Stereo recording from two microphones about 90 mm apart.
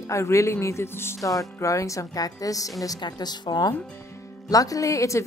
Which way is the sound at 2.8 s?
50° left (ahead or behind).